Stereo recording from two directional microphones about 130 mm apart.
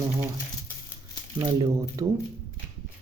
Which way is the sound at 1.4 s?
25° right (ahead or behind).